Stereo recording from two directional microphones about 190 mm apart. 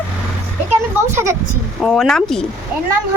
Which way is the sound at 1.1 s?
15° right (ahead or behind).